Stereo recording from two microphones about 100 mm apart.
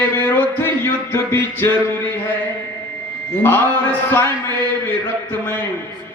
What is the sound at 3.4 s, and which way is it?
Speech, 20° left (ahead or behind).